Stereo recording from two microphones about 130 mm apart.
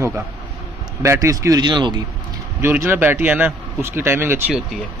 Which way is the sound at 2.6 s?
15° right (ahead or behind).